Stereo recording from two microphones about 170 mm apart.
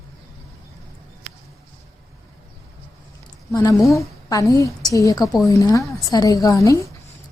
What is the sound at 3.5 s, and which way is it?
A woman's voice, 20° left (ahead or behind).